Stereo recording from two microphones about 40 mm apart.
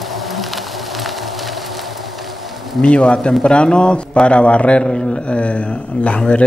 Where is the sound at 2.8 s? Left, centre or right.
Centre.